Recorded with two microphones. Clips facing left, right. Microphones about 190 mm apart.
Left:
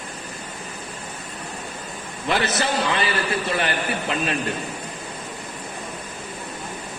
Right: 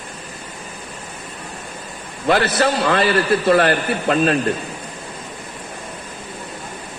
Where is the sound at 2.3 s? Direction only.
70° right (ahead or behind).